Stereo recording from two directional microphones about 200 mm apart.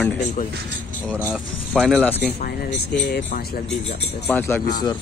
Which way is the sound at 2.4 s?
50° left (ahead or behind).